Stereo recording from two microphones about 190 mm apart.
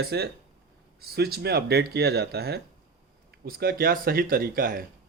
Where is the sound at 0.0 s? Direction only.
55° right (ahead or behind).